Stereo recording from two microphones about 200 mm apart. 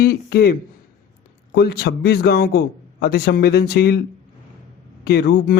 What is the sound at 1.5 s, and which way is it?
Speech, 55° left (ahead or behind).